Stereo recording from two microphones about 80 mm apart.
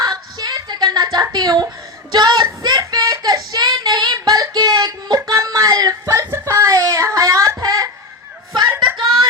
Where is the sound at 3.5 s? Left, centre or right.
Right.